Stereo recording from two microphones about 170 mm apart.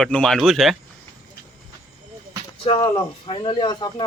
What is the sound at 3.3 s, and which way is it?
Speech, 30° left (ahead or behind).